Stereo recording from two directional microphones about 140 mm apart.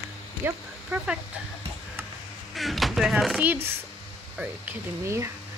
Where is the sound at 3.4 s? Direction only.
15° right (ahead or behind).